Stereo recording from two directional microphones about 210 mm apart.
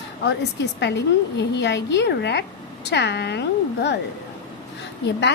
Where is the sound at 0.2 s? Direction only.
55° left (ahead or behind).